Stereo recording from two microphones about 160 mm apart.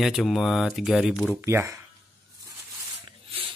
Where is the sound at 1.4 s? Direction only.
15° right (ahead or behind).